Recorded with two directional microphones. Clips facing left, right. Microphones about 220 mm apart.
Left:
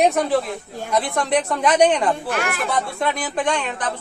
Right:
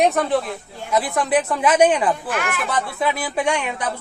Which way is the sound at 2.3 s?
40° left (ahead or behind).